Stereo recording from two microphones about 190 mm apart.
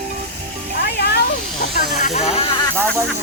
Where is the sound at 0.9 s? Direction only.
60° left (ahead or behind).